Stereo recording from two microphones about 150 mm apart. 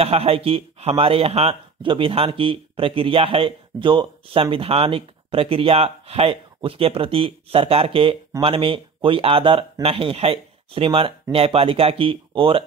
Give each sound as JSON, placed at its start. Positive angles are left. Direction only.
{"t": 0.0, "sound": "speech", "side_deg": -40}